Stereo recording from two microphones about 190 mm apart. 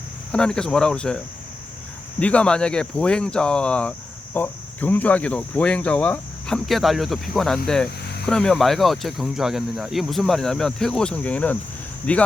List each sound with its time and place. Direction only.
0.3 s speech: 5° left (ahead or behind)
4.4 s cricket: 10° left (ahead or behind)
8.0 s a sound: 60° left (ahead or behind)
8.3 s speech: 5° left (ahead or behind)
12.1 s cricket: 5° left (ahead or behind)